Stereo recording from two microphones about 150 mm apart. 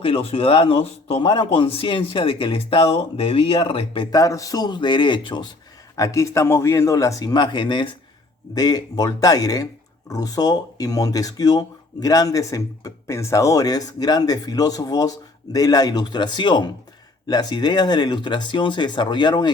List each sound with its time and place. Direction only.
0.0 s speech: 40° left (ahead or behind)
4.1 s speech: 20° left (ahead or behind)
6.0 s speech: 20° left (ahead or behind)